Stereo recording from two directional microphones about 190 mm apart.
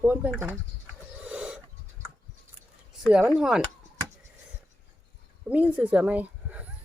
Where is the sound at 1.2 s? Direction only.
5° right (ahead or behind).